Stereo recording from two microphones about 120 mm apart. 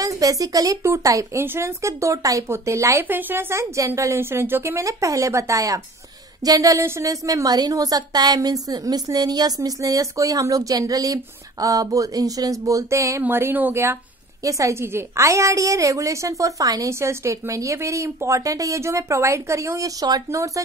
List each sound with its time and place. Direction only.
0.0 s a woman's voice: 30° right (ahead or behind)